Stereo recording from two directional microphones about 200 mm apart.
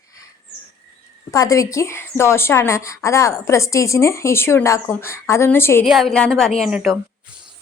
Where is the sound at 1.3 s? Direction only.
15° left (ahead or behind).